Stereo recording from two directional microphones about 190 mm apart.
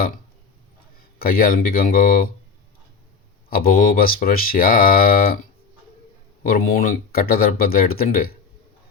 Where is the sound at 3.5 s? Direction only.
50° left (ahead or behind).